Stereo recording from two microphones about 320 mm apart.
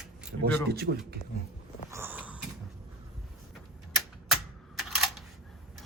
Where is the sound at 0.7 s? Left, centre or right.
Right.